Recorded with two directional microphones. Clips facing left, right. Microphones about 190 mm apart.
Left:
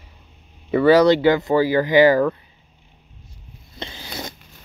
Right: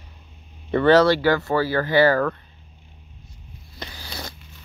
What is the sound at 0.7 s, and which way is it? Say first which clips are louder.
Speech: left 2 dB; 10° left (ahead or behind).